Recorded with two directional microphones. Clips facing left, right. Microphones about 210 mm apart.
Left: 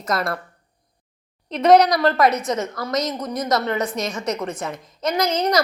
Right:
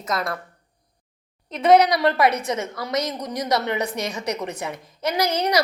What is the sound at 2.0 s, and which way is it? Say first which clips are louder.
A woman's voice: left 2 dB; 10° right (ahead or behind).